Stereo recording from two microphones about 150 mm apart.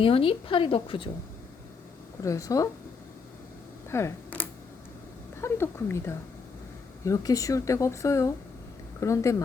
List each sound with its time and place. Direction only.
0.0 s a woman's voice: 40° left (ahead or behind)
2.2 s speech: 20° left (ahead or behind)
3.9 s speech: 15° left (ahead or behind)